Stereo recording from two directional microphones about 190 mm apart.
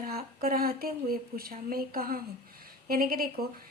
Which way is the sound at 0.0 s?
50° right (ahead or behind).